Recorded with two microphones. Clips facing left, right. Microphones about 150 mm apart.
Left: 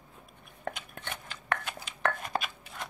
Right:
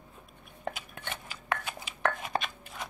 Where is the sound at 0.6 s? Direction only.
5° right (ahead or behind).